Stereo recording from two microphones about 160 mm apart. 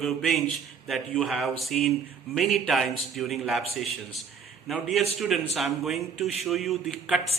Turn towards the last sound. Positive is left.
turn(degrees=0)  # may be behind; listen again after turning